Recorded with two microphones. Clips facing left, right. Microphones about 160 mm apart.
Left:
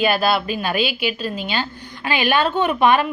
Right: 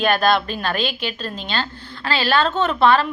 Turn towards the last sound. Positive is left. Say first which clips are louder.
# even
turn(degrees=15)  # may be behind; listen again after turning